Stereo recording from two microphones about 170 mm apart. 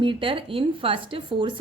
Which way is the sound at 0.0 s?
30° right (ahead or behind).